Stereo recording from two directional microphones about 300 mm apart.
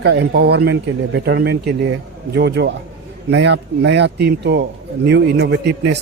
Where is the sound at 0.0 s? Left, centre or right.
Right.